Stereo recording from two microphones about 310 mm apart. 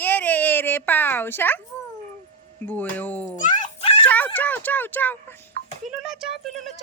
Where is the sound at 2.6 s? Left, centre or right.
Centre.